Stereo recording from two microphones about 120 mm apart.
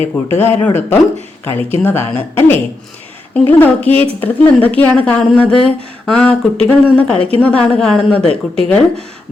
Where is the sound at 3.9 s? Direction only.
55° right (ahead or behind).